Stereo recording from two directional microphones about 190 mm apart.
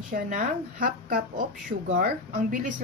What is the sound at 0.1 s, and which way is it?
Speech, 45° right (ahead or behind).